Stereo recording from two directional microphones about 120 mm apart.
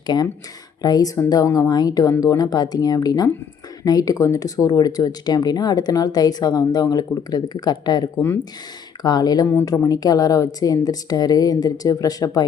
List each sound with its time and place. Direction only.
0.8 s speech: 30° left (ahead or behind)